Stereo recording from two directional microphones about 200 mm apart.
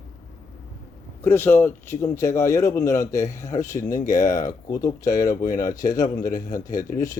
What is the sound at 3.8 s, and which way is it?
Speech, 40° left (ahead or behind).